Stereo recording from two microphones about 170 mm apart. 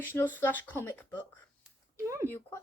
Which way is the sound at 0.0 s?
10° left (ahead or behind).